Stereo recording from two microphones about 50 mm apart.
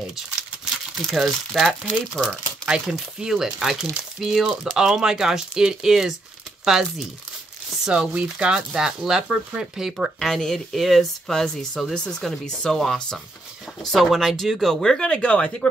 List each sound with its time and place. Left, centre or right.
1.0 s speech: centre
2.7 s speech: centre
8.1 s speech: right
10.1 s speech: centre